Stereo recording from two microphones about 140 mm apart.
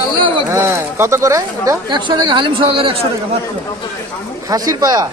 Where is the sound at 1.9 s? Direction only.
35° right (ahead or behind).